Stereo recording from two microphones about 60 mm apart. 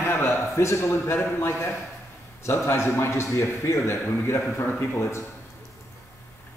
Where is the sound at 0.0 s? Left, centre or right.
Left.